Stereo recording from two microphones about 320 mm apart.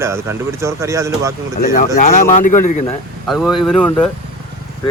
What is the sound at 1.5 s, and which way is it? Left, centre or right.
A man's voice, left.